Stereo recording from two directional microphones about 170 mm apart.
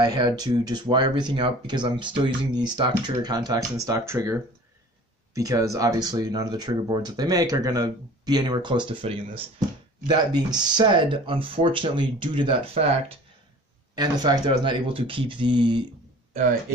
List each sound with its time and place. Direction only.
0.0 s speech: 25° right (ahead or behind)
13.9 s speech: 25° right (ahead or behind)